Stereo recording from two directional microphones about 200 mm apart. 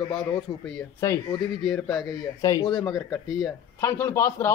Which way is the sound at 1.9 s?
15° left (ahead or behind).